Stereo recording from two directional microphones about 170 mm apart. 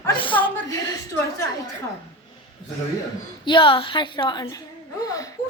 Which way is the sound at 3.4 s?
30° left (ahead or behind).